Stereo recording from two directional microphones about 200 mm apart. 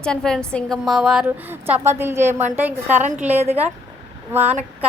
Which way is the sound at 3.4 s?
30° right (ahead or behind).